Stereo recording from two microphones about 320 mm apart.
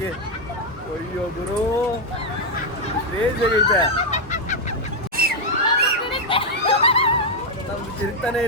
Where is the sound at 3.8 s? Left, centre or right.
Left.